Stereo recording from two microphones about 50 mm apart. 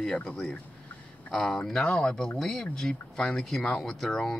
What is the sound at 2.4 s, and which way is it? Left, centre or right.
Speech, centre.